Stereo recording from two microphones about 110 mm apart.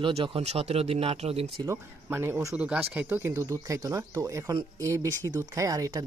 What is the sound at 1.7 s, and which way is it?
Speech, 25° right (ahead or behind).